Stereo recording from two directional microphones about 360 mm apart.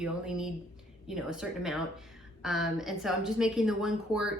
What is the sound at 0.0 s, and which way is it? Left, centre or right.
A woman's voice, centre.